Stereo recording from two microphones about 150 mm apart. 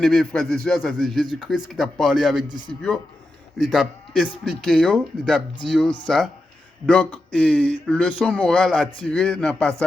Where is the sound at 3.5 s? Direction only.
Centre (ahead or behind).